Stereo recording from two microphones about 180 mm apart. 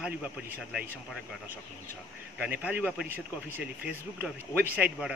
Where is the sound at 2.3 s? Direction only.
10° right (ahead or behind).